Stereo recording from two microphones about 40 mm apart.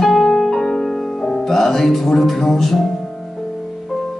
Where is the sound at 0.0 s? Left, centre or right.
Centre.